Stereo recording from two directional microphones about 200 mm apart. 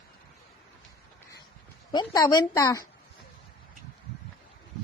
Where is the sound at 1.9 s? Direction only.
20° left (ahead or behind).